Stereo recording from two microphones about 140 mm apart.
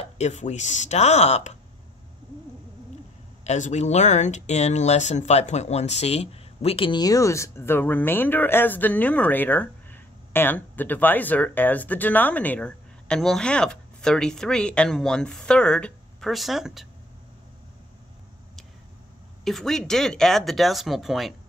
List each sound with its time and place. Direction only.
0.2 s speech: 55° left (ahead or behind)
3.4 s speech: 60° left (ahead or behind); by 16.8 s centre (ahead or behind)
19.4 s speech: centre (ahead or behind)